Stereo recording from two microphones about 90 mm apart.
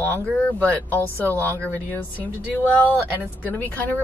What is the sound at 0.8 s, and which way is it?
Speech, 20° left (ahead or behind).